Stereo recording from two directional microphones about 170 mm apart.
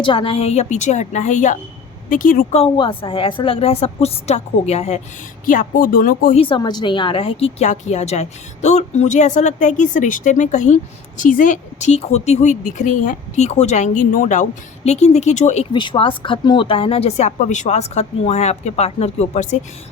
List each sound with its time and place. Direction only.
0.0 s a woman's voice: 30° left (ahead or behind); by 2.6 s 55° left (ahead or behind)
2.6 s speech: 30° left (ahead or behind)
5.5 s speech: 55° left (ahead or behind)
6.3 s a woman's voice: 30° left (ahead or behind)
15.7 s speech: 30° left (ahead or behind)